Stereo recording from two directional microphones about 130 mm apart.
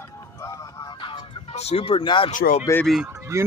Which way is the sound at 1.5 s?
55° left (ahead or behind).